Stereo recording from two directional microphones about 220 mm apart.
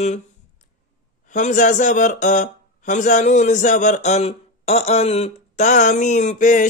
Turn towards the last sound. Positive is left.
turn(degrees=35)  # may be behind; listen again after turning